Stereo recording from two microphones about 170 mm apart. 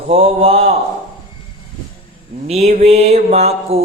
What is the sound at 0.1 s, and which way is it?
Mantra, 35° right (ahead or behind).